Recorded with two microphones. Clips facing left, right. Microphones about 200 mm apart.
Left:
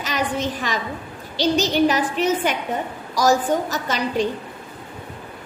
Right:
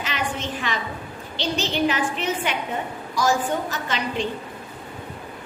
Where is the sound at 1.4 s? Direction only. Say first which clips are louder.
Left 6 dB; 40° left (ahead or behind).